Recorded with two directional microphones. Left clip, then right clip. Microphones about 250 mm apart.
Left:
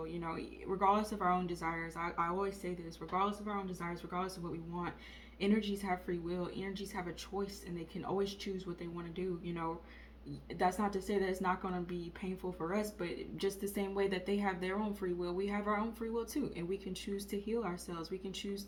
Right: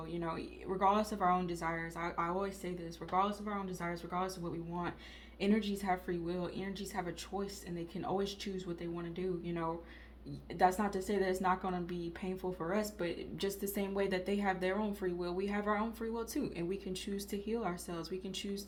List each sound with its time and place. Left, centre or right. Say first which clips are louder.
0.8 s a woman's voice: right 1 dB; right
5.4 s a woman's voice: even; right